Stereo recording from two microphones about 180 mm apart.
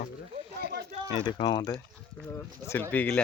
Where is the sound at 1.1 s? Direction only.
25° left (ahead or behind).